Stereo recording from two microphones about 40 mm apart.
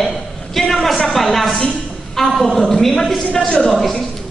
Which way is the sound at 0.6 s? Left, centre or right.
Centre.